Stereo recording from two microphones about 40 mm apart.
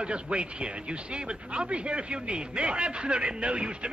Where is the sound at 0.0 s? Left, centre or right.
Right.